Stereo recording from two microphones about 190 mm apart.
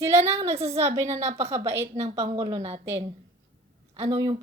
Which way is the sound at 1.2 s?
35° right (ahead or behind).